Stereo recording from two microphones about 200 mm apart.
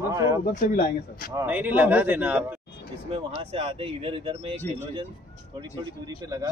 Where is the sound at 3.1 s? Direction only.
30° right (ahead or behind).